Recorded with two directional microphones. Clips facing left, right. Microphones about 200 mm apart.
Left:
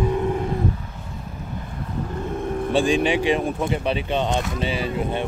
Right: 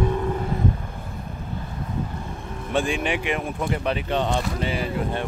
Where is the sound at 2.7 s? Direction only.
30° left (ahead or behind).